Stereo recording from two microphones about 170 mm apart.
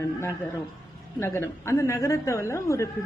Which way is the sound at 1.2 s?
15° left (ahead or behind).